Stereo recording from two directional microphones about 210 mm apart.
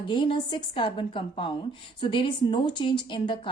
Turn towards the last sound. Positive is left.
turn(degrees=25)  # may be behind; listen again after turning